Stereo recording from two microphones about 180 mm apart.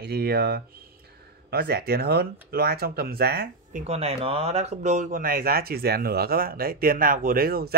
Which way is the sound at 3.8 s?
35° right (ahead or behind).